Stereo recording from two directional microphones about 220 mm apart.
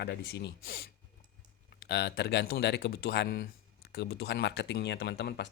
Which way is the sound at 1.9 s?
50° left (ahead or behind).